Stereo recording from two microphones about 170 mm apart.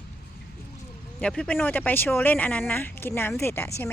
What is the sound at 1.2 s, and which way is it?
Speech, 5° left (ahead or behind).